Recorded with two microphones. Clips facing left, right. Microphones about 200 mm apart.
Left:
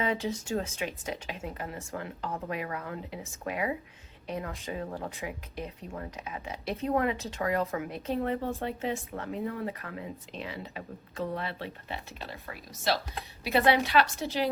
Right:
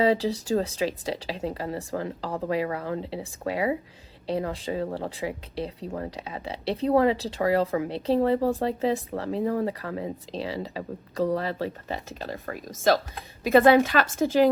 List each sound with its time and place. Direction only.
0.0 s speech: 35° right (ahead or behind); by 14.5 s 50° right (ahead or behind)